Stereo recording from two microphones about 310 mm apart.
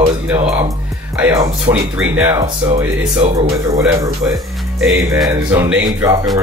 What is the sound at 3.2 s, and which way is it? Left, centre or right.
Speech, right.